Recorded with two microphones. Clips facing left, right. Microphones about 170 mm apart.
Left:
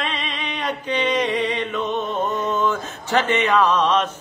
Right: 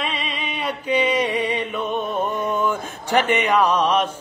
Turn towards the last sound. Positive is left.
turn(degrees=-10)  # may be behind; listen again after turning